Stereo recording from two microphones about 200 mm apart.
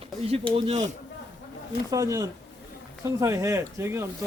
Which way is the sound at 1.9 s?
15° right (ahead or behind).